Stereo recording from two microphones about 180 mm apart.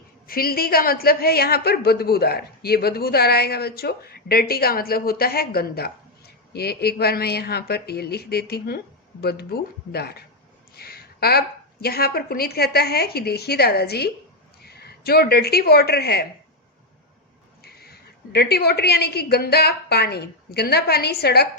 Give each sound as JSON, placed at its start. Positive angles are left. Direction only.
{"t": 0.3, "sound": "a woman's voice", "side_deg": 55}
{"t": 17.6, "sound": "a woman's voice", "side_deg": 60}